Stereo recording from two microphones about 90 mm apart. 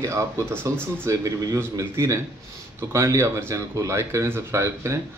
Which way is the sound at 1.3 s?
40° right (ahead or behind).